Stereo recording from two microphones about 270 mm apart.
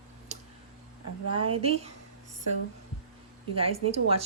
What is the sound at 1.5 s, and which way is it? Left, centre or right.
Speech, right.